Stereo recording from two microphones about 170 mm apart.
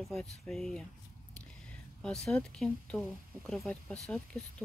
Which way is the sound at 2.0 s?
5° left (ahead or behind).